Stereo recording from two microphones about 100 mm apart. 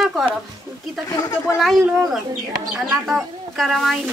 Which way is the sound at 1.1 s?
35° left (ahead or behind).